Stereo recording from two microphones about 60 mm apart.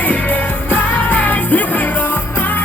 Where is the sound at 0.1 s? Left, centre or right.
Left.